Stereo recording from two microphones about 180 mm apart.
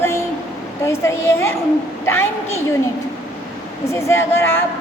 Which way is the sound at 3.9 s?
15° left (ahead or behind).